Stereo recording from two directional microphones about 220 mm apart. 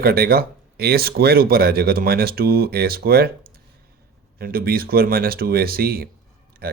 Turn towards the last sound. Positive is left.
turn(degrees=-45)  # may be behind; listen again after turning